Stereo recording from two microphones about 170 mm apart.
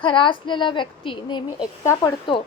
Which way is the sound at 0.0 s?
30° left (ahead or behind).